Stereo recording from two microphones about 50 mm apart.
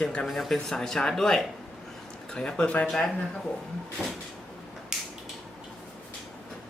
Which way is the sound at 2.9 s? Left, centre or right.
Centre.